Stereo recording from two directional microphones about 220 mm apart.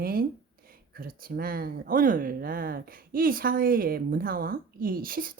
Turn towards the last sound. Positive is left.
turn(degrees=-40)  # may be behind; listen again after turning